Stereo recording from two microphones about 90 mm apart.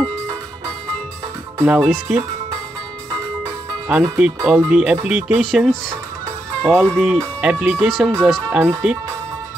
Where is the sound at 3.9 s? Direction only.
10° right (ahead or behind).